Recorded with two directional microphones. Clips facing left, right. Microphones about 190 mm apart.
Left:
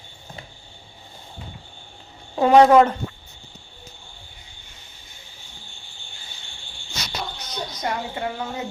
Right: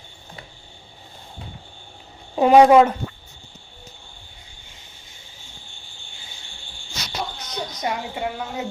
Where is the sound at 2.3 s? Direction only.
10° right (ahead or behind).